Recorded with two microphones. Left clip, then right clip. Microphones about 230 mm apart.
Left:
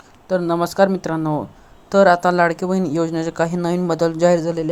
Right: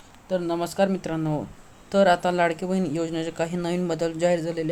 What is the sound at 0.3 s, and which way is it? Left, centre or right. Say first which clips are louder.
Speech: left 7 dB; left.